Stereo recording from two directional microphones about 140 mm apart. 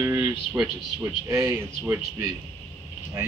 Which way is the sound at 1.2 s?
20° right (ahead or behind).